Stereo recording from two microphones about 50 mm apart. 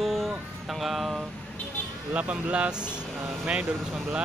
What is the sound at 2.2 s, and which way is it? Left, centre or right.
Speech, right.